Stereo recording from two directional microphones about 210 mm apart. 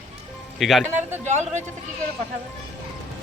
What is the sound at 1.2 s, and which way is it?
Speech, 35° right (ahead or behind).